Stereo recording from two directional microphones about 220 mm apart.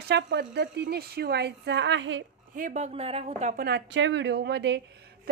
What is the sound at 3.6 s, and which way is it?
Speech, 55° right (ahead or behind).